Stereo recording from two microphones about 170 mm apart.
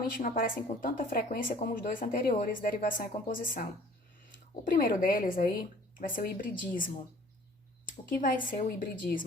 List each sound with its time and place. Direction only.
0.2 s speech: 50° left (ahead or behind)
8.4 s speech: 55° left (ahead or behind)